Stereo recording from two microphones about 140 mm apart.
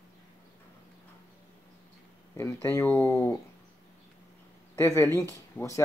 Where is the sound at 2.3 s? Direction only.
15° left (ahead or behind).